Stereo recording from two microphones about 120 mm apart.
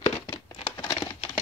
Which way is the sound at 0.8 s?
40° left (ahead or behind).